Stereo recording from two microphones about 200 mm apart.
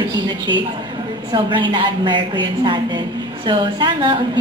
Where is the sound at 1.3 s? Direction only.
25° right (ahead or behind).